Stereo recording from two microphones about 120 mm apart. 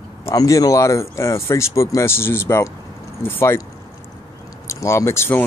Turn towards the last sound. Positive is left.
turn(degrees=20)  # may be behind; listen again after turning